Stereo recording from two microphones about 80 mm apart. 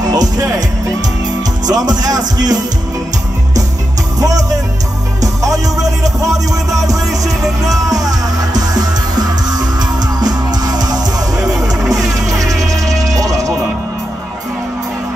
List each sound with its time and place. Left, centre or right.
0.0 s music: right
1.7 s music: right
4.2 s music: right
12.1 s music: right